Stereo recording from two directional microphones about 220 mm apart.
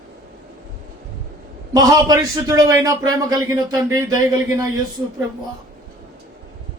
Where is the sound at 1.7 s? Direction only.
15° right (ahead or behind).